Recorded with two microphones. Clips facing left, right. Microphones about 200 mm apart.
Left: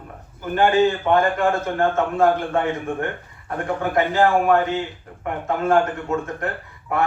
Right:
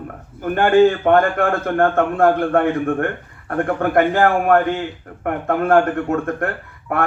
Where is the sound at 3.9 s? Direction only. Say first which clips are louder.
Right 2 dB; 55° right (ahead or behind).